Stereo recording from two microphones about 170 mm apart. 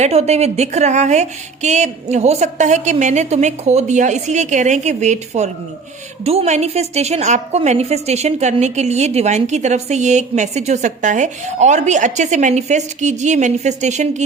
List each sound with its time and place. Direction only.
0.0 s a woman's voice: 40° right (ahead or behind)